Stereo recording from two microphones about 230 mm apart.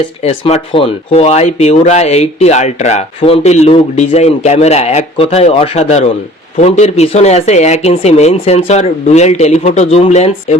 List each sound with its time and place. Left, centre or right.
0.2 s speech: left